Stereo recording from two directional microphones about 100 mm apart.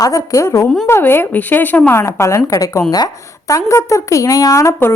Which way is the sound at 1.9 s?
30° left (ahead or behind).